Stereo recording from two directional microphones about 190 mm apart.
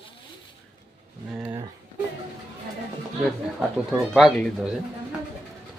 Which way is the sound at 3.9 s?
Centre (ahead or behind).